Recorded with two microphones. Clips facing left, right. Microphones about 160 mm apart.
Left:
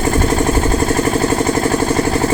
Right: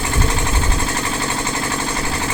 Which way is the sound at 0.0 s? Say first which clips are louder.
Left 8 dB; 45° left (ahead or behind).